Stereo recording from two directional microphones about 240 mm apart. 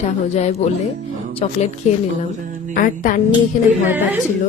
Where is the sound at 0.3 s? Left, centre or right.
Left.